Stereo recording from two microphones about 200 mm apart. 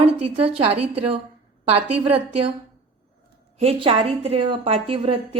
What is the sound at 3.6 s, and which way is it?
A woman's voice, 30° right (ahead or behind).